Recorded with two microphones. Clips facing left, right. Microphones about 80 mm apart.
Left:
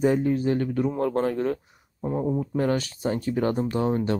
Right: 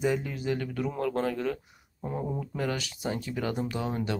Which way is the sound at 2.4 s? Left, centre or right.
Left.